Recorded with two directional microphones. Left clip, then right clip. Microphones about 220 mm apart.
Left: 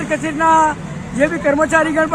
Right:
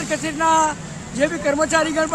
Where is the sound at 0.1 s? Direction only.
10° right (ahead or behind).